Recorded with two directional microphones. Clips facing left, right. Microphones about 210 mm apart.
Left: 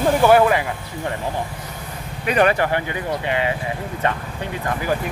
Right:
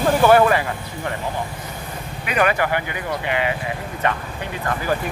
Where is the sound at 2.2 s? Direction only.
35° left (ahead or behind).